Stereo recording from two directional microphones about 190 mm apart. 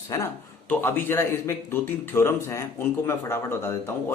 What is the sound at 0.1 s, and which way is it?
Speech, 15° left (ahead or behind).